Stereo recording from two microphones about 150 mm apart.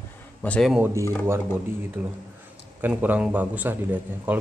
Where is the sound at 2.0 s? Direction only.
10° right (ahead or behind).